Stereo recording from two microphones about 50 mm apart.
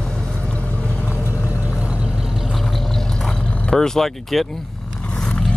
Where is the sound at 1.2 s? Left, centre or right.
Left.